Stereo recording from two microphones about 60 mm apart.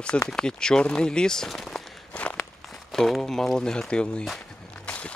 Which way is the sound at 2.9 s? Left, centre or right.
Centre.